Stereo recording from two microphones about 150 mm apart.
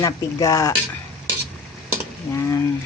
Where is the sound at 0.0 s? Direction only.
20° left (ahead or behind).